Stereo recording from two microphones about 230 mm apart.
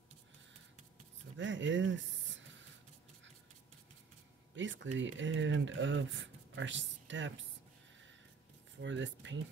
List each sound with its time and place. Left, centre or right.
1.3 s speech: right
4.6 s speech: right
8.8 s speech: right